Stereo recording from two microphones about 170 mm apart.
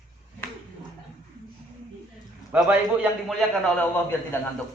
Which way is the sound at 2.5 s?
10° right (ahead or behind).